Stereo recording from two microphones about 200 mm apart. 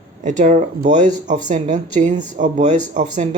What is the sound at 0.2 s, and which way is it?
Speech, 35° right (ahead or behind).